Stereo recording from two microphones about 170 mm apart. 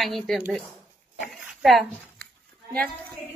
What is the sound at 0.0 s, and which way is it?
Speech, centre (ahead or behind).